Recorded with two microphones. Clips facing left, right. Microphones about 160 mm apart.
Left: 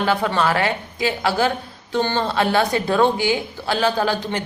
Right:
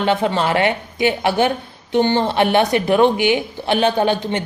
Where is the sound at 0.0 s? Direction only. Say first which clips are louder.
Right 2 dB; 25° right (ahead or behind).